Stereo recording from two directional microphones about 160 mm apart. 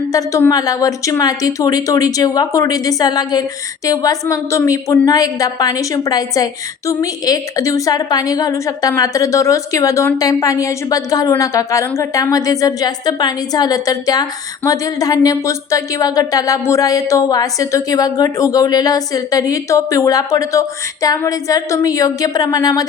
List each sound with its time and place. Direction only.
0.1 s a woman's voice: 20° left (ahead or behind)